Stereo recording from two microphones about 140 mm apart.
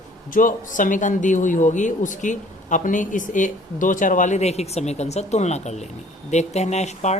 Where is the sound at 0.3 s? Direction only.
75° left (ahead or behind).